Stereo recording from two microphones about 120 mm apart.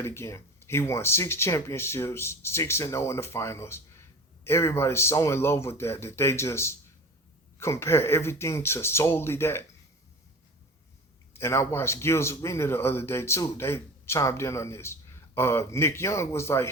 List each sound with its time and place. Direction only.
0.0 s a man's voice: 20° left (ahead or behind)
11.3 s a man's voice: 20° left (ahead or behind)